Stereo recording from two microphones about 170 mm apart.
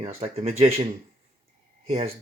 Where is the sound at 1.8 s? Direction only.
35° right (ahead or behind).